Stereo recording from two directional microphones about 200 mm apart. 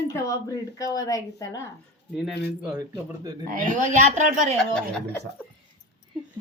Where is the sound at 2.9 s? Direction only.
15° right (ahead or behind).